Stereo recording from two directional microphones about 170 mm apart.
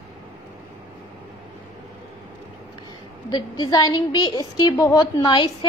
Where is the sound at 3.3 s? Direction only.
25° left (ahead or behind).